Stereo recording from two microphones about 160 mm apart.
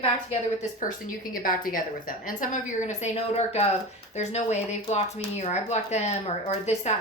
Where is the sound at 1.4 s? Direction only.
60° left (ahead or behind).